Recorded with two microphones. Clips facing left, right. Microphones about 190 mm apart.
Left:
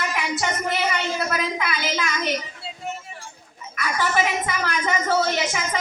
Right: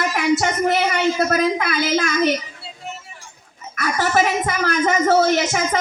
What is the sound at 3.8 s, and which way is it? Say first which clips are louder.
A woman's voice: right 4 dB; 45° right (ahead or behind).